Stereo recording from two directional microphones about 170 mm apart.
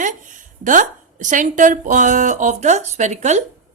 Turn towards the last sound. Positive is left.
turn(degrees=-45)  # may be behind; listen again after turning